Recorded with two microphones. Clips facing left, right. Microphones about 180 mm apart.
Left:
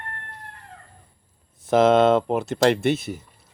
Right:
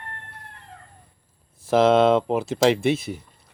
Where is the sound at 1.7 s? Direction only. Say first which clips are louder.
Even; centre (ahead or behind).